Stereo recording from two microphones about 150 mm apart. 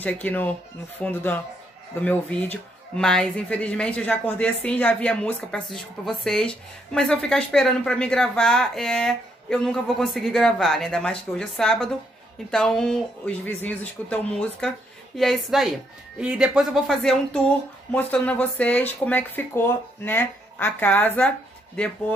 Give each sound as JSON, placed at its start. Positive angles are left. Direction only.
{"t": 0.0, "sound": "a woman's voice", "side_deg": 10}